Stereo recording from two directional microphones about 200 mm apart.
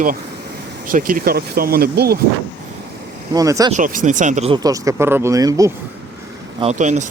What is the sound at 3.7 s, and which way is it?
Speech, 40° right (ahead or behind).